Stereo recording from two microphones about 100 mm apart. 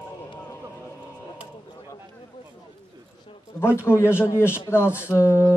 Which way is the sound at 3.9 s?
25° left (ahead or behind).